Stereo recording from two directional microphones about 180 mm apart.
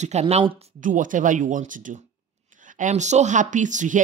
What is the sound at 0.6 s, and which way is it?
Speech, 45° right (ahead or behind).